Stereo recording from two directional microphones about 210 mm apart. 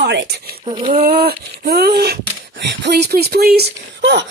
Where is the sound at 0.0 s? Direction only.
50° right (ahead or behind).